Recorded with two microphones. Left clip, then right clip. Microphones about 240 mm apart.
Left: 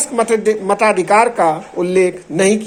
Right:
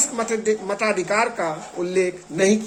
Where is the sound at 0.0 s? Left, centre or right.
Left.